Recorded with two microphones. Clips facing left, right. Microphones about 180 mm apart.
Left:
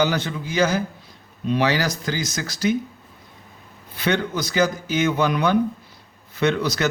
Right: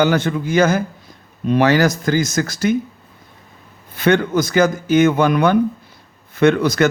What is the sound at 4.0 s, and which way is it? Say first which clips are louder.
Speech: right 7 dB; 50° right (ahead or behind).